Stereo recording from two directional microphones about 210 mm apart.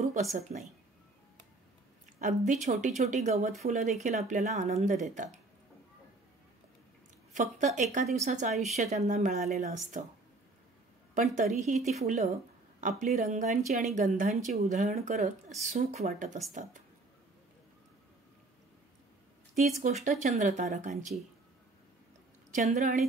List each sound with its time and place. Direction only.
0.0 s speech: 35° right (ahead or behind)
2.1 s a woman's voice: 35° right (ahead or behind)
7.3 s a woman's voice: 35° right (ahead or behind)
11.5 s a woman's voice: 35° right (ahead or behind)
19.5 s a woman's voice: 35° right (ahead or behind)
22.5 s a woman's voice: 30° right (ahead or behind)